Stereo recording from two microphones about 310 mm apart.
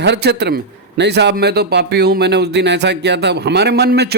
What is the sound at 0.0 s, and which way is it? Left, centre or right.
A man's voice, right.